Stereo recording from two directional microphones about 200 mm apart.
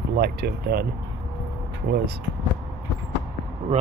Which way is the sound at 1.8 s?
55° right (ahead or behind).